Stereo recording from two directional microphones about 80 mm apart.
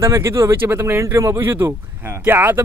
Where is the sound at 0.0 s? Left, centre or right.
Right.